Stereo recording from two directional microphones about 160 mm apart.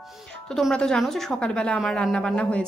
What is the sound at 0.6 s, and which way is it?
A woman's voice, 5° left (ahead or behind).